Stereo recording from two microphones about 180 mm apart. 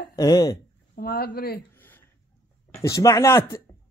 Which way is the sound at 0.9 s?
55° left (ahead or behind).